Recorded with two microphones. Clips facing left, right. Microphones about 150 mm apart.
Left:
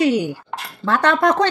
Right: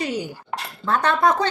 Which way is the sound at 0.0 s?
75° left (ahead or behind).